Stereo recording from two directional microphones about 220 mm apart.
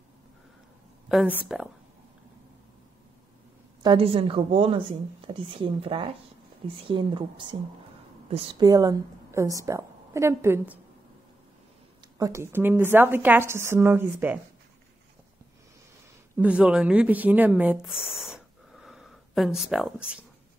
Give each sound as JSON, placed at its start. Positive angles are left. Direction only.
{"t": 1.0, "sound": "speech", "side_deg": -5}
{"t": 3.8, "sound": "a woman's voice", "side_deg": -25}
{"t": 12.2, "sound": "a woman's voice", "side_deg": -15}
{"t": 16.3, "sound": "speech", "side_deg": -5}